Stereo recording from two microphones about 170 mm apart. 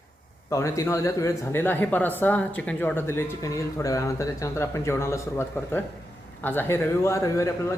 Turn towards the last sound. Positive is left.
turn(degrees=15)  # may be behind; listen again after turning